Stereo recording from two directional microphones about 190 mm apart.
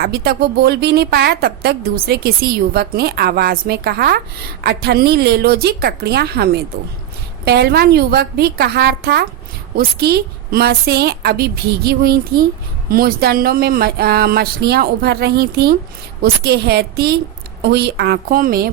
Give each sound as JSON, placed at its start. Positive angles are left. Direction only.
{"t": 0.0, "sound": "a woman's voice", "side_deg": -55}